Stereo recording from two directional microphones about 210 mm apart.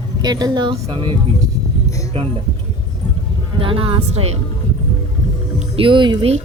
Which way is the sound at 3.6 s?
25° right (ahead or behind).